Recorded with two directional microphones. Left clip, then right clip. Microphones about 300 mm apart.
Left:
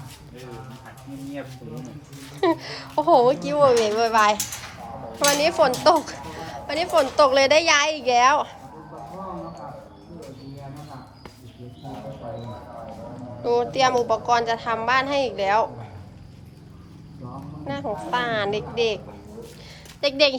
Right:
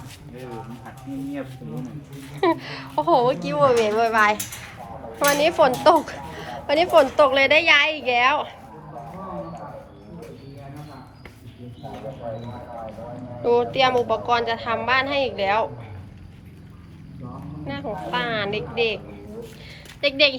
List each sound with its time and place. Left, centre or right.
2.3 s a woman's voice: centre
13.4 s a woman's voice: centre
17.7 s a woman's voice: centre
20.0 s a woman's voice: centre